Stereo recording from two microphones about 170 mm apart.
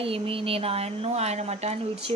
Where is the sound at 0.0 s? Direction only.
35° right (ahead or behind).